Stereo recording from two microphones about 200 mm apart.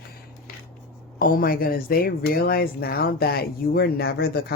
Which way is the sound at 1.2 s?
45° left (ahead or behind).